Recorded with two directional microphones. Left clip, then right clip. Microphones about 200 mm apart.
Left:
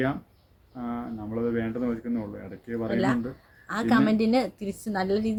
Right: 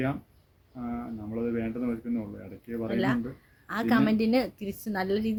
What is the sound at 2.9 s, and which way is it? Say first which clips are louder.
A woman's voice: left 2 dB; 15° right (ahead or behind).